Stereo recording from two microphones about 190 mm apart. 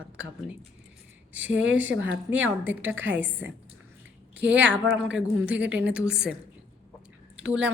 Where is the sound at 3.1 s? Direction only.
10° right (ahead or behind).